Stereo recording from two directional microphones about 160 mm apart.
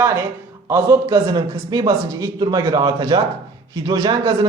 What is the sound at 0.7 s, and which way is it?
A man's voice, 20° right (ahead or behind).